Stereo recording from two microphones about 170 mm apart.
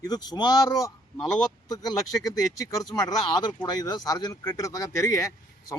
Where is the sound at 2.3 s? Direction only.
20° left (ahead or behind).